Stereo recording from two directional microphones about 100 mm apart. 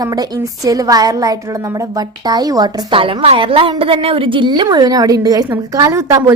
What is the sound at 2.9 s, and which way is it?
A woman's voice, 60° right (ahead or behind).